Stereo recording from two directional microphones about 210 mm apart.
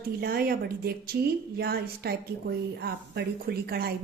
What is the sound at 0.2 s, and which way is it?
A woman's voice, 45° right (ahead or behind).